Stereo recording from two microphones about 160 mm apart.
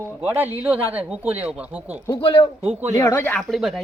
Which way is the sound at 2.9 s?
20° left (ahead or behind).